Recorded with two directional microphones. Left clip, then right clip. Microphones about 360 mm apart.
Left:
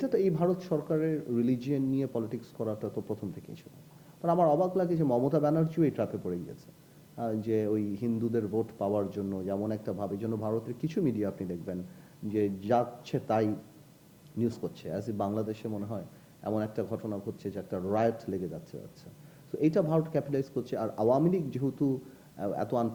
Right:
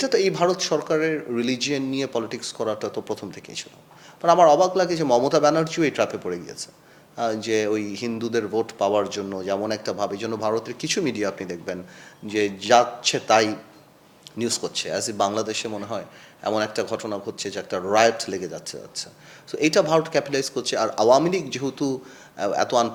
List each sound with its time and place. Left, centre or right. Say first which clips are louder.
0.0 s speech: right 8 dB; centre
3.6 s speech: right 17 dB; centre
7.4 s a man's voice: right 4 dB; centre
17.3 s speech: right 9 dB; centre